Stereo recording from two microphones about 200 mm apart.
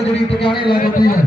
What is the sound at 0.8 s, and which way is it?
Speech, 45° left (ahead or behind).